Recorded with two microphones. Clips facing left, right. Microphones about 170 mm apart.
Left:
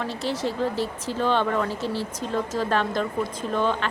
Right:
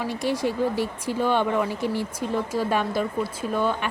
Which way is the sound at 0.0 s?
15° right (ahead or behind).